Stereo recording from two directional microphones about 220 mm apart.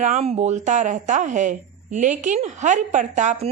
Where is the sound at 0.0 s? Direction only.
30° right (ahead or behind).